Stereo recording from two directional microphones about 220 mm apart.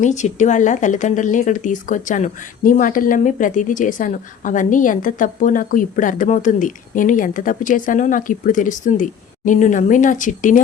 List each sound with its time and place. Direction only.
0.0 s a woman's voice: 30° left (ahead or behind)